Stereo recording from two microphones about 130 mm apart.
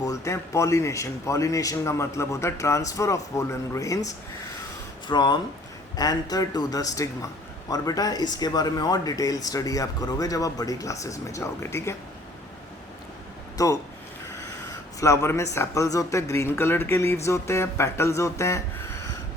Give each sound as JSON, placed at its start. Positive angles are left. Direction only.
{"t": 0.0, "sound": "speech", "side_deg": 25}
{"t": 13.6, "sound": "speech", "side_deg": 25}
{"t": 14.7, "sound": "a sound", "side_deg": 25}
{"t": 15.5, "sound": "speech", "side_deg": 20}